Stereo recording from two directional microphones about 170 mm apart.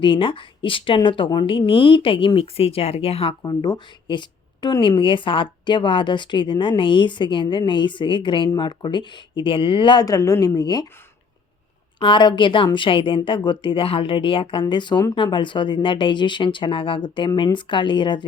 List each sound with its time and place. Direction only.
0.0 s speech: 30° left (ahead or behind)
11.9 s speech: 30° left (ahead or behind)